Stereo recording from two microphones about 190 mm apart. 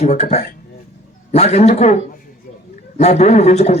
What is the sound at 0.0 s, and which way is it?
A man's voice, 35° left (ahead or behind).